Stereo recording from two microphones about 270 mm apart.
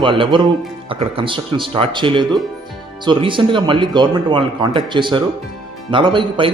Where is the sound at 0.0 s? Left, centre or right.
Centre.